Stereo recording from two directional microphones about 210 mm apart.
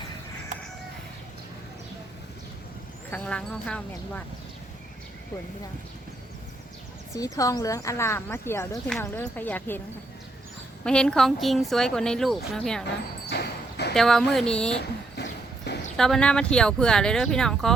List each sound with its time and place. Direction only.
3.1 s a woman's voice: 5° left (ahead or behind)
7.3 s speech: 15° left (ahead or behind)
10.8 s a woman's voice: 5° left (ahead or behind)
13.3 s clip-clop: 50° left (ahead or behind)
13.9 s a woman's voice: centre (ahead or behind)
14.8 s a sound: 55° left (ahead or behind)
16.0 s a woman's voice: 5° left (ahead or behind)